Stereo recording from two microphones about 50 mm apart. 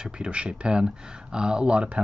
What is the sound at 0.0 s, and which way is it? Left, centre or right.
Speech, right.